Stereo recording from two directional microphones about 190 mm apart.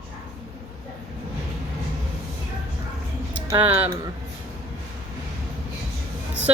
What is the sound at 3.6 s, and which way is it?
Speech, 10° right (ahead or behind).